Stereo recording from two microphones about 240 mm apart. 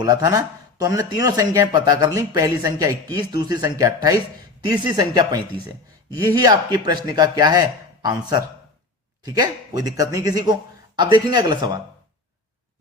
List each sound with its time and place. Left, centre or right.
0.0 s speech: centre
6.4 s speech: centre